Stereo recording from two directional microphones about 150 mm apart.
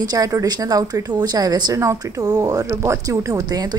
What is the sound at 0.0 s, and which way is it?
Speech, 25° right (ahead or behind).